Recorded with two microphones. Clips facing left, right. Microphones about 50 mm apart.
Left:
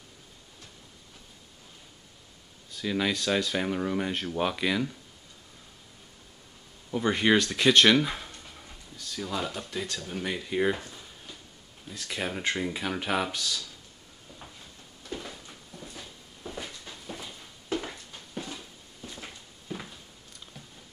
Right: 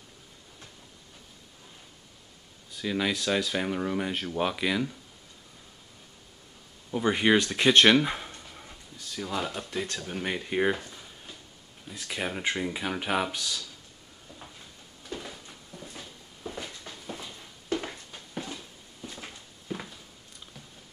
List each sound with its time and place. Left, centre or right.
2.7 s speech: centre
6.9 s speech: centre
7.3 s speech: centre
8.4 s dog: centre
9.1 s speech: centre
11.9 s speech: centre
15.0 s a sound: centre
17.7 s a sound: centre